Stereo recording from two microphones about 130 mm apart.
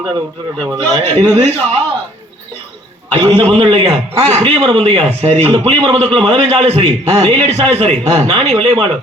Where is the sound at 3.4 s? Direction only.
55° right (ahead or behind).